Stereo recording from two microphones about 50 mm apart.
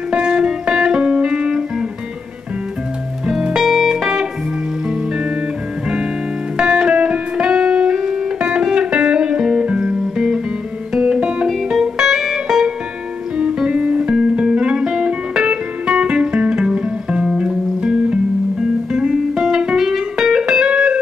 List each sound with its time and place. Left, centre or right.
0.1 s music: centre
3.3 s music: centre
6.5 s music: centre
13.4 s music: right
17.3 s music: centre
17.7 s music: right